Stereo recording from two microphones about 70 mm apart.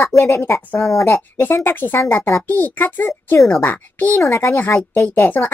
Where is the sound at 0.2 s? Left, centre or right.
Left.